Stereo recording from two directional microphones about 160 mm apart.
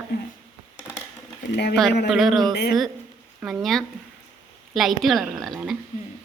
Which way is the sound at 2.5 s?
90° left.